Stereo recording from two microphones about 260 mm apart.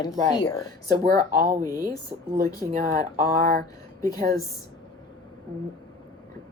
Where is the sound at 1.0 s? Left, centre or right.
Right.